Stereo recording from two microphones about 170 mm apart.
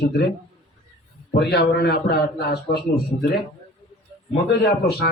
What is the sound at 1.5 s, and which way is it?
A man's voice, 75° left (ahead or behind).